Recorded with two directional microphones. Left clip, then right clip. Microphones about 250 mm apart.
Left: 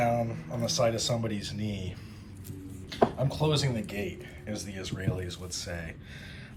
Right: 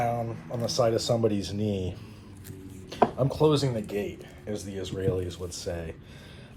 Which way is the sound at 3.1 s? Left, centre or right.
Centre.